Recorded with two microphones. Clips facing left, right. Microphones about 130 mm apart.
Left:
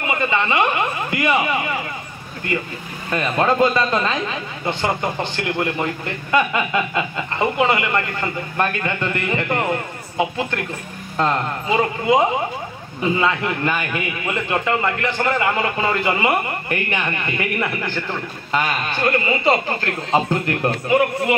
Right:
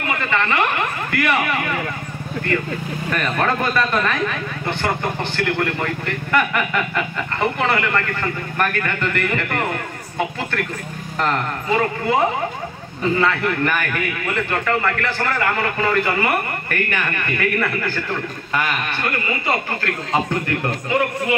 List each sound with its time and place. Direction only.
0.0 s speech: 20° left (ahead or behind)
3.1 s speech: 20° left (ahead or behind)
11.1 s speech: 20° left (ahead or behind)